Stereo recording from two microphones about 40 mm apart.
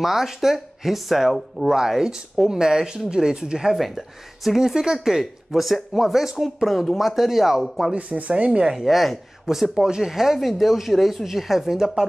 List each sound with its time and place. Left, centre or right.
0.0 s speech: centre
3.7 s speech: centre
7.9 s speech: right
8.5 s speech: centre
8.7 s speech: centre
9.5 s speech: centre